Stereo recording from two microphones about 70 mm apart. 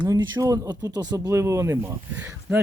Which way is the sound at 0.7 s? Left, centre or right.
Right.